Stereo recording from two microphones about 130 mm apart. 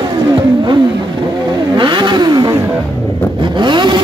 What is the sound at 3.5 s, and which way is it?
Vehicle, 35° right (ahead or behind).